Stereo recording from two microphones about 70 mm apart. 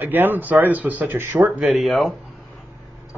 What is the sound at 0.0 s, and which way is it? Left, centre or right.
Speech, right.